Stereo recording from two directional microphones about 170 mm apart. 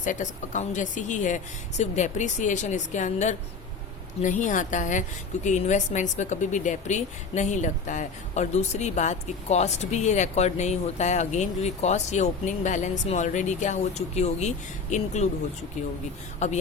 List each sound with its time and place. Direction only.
0.0 s a woman's voice: 50° left (ahead or behind)
16.4 s a woman's voice: 40° left (ahead or behind)